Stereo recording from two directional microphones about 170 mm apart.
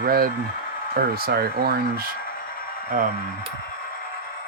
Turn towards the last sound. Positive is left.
turn(degrees=-55)  # may be behind; listen again after turning